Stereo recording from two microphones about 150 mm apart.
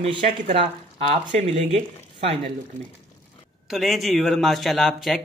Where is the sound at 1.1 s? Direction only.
45° right (ahead or behind).